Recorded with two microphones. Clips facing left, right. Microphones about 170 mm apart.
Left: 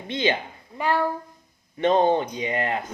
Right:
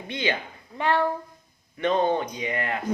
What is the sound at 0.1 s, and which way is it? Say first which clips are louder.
Speech: left 4 dB; 25° left (ahead or behind).